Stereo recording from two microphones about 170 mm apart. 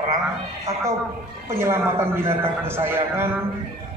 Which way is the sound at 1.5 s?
15° right (ahead or behind).